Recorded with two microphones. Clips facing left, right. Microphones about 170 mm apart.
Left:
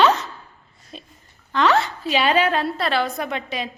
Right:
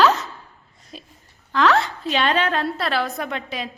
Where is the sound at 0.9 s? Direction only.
5° right (ahead or behind).